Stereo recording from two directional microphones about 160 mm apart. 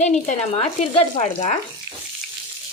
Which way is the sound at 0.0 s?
50° left (ahead or behind).